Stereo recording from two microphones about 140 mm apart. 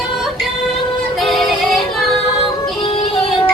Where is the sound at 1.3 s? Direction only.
Centre (ahead or behind).